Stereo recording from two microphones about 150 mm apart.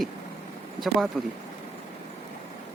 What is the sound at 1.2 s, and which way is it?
Speech, 5° right (ahead or behind).